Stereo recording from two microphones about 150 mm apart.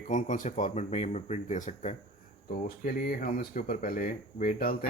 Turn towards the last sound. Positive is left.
turn(degrees=70)  # may be behind; listen again after turning